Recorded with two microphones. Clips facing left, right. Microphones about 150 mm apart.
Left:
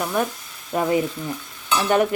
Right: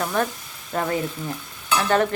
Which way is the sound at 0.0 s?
10° left (ahead or behind).